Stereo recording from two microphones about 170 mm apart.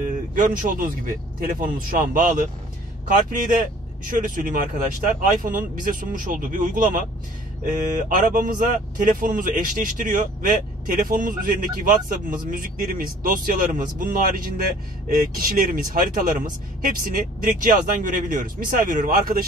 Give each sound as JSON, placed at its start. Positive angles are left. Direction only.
{"t": 0.3, "sound": "speech", "side_deg": -50}
{"t": 3.3, "sound": "speech", "side_deg": -50}
{"t": 8.3, "sound": "speech", "side_deg": -50}